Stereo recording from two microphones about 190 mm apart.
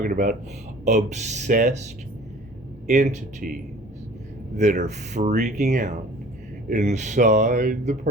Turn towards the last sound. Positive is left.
turn(degrees=-40)  # may be behind; listen again after turning